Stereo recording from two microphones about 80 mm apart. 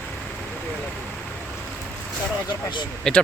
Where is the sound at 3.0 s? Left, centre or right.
Centre.